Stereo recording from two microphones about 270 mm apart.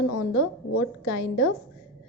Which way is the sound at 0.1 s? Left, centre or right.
Left.